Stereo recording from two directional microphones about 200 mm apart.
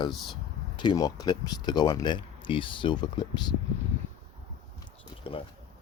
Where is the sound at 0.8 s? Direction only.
20° left (ahead or behind).